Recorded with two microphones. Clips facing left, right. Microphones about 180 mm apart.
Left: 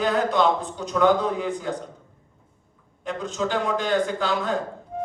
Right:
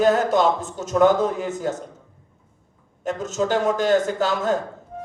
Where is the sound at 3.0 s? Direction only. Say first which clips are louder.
Right 3 dB; 45° right (ahead or behind).